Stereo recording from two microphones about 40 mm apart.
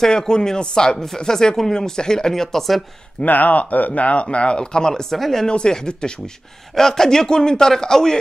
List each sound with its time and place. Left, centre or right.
0.0 s speech: centre
3.3 s speech: left; by 5.0 s centre
5.1 s speech: centre
5.5 s speech: centre